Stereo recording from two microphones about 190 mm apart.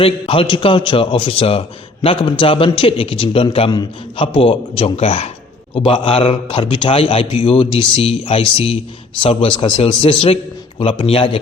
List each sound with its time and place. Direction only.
0.0 s a man's voice: 30° left (ahead or behind)